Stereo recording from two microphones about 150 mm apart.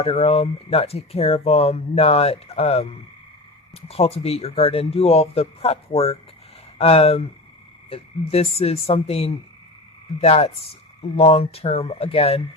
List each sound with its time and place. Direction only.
0.0 s speech: 40° left (ahead or behind)